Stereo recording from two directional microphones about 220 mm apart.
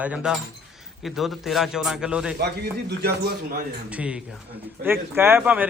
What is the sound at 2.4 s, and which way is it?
Speech, 50° right (ahead or behind).